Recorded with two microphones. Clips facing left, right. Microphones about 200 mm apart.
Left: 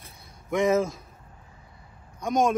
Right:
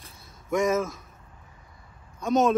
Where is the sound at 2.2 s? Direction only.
15° left (ahead or behind).